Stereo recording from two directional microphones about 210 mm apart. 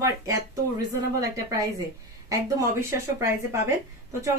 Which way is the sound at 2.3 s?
15° right (ahead or behind).